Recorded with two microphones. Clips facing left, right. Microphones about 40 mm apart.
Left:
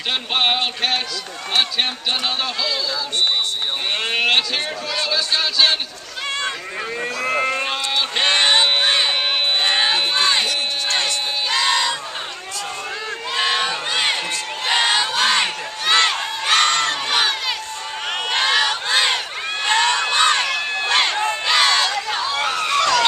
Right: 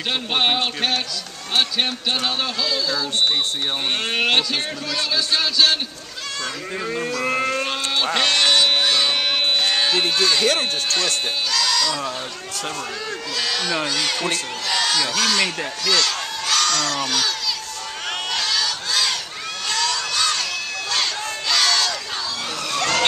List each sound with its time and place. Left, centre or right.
0.3 s speech: centre
4.1 s speech: centre
6.9 s speech: centre
8.1 s a sound: left
10.9 s speech: left
13.3 s a man's voice: left
18.3 s battle cry: left
19.6 s run: left
22.2 s a sound: left